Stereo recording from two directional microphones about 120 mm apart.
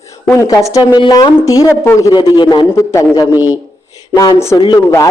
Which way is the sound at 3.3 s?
10° right (ahead or behind).